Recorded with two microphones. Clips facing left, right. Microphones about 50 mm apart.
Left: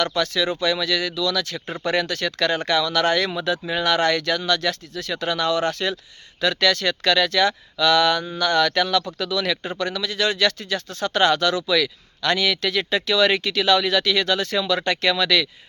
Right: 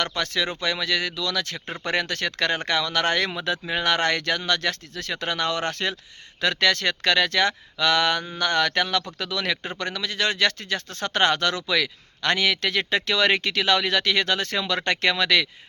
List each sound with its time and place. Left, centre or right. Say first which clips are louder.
0.0 s speech: left 4 dB; right